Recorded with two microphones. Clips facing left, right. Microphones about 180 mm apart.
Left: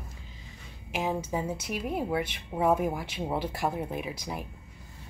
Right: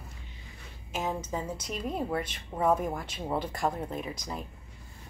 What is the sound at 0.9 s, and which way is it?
Speech, 10° left (ahead or behind).